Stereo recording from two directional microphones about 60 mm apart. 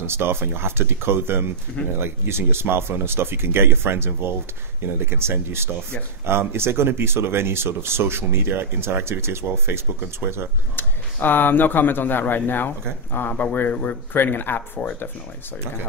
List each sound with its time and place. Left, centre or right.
0.0 s speech: right
10.8 s speech: left